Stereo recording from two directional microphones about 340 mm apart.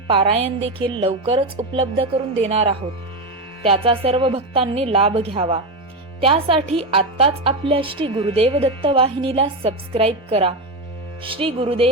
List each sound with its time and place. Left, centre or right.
0.1 s a woman's voice: centre